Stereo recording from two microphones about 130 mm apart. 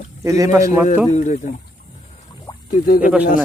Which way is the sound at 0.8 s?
70° left (ahead or behind).